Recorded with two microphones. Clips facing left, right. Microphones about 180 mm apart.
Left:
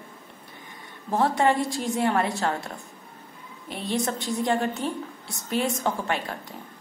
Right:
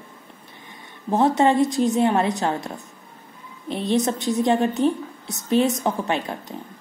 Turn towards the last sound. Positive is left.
turn(degrees=-20)  # may be behind; listen again after turning